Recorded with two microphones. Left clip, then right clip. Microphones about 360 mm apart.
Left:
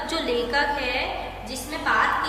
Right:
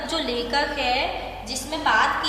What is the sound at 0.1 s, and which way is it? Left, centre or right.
Music, centre.